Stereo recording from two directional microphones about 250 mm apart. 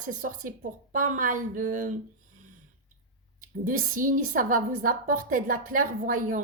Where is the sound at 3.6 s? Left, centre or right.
Right.